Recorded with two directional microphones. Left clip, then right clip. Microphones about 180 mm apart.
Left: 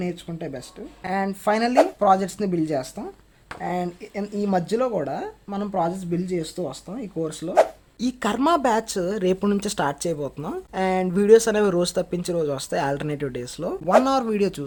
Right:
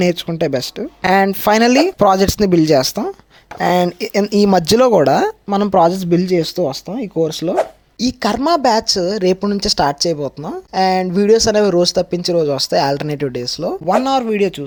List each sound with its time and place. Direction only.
0.0 s speech: 55° right (ahead or behind)
7.2 s speech: 45° right (ahead or behind)
7.5 s a sound: centre (ahead or behind)
8.0 s a woman's voice: 20° right (ahead or behind)
9.4 s a woman's voice: 5° right (ahead or behind)
9.7 s a woman's voice: 20° right (ahead or behind)